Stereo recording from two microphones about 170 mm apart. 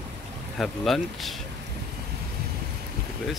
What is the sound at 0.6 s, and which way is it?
Speech, centre (ahead or behind).